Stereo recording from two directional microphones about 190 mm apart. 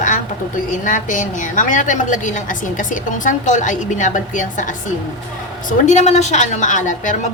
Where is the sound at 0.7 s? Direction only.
40° left (ahead or behind).